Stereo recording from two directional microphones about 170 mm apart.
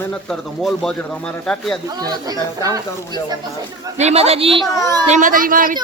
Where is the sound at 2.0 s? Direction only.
20° right (ahead or behind).